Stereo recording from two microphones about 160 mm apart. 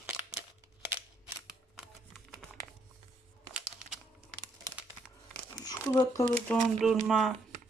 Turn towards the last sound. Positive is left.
turn(degrees=0)  # may be behind; listen again after turning